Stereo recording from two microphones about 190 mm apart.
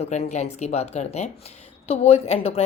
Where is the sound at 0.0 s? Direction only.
35° left (ahead or behind).